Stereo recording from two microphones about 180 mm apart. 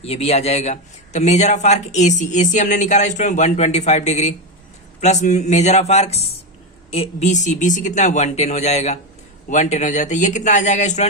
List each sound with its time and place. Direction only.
0.0 s a man's voice: 35° left (ahead or behind)